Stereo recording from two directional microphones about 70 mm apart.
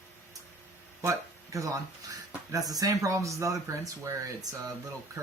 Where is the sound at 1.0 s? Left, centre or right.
Right.